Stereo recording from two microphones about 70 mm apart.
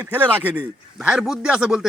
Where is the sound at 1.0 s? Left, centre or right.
Centre.